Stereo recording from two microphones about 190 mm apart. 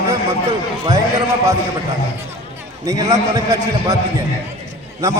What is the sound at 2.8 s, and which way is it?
Speech, 20° right (ahead or behind).